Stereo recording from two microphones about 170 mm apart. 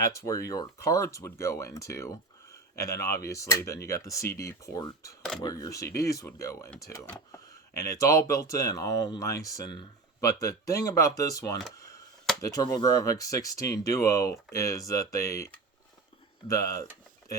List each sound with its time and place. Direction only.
0.3 s speech: 20° left (ahead or behind)
16.5 s speech: 20° left (ahead or behind)